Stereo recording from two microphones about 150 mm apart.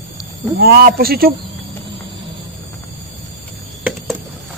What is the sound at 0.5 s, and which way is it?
Speech, 90° right.